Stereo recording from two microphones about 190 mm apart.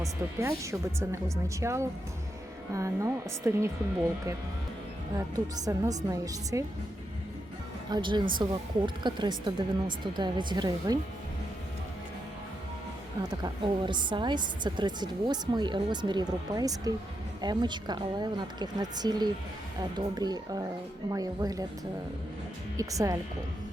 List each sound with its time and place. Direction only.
0.3 s speech: 15° right (ahead or behind)
5.1 s speech: 20° right (ahead or behind)
7.9 s a woman's voice: 25° right (ahead or behind)
13.2 s a woman's voice: 20° right (ahead or behind)
22.8 s speech: 15° right (ahead or behind)